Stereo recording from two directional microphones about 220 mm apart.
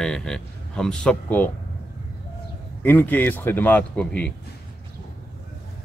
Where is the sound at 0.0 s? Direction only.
5° left (ahead or behind).